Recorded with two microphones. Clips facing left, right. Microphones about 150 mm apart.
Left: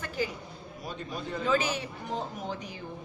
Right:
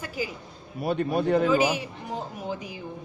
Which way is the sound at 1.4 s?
10° right (ahead or behind).